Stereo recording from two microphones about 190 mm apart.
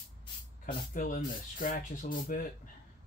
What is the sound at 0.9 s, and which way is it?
Speech, 45° left (ahead or behind).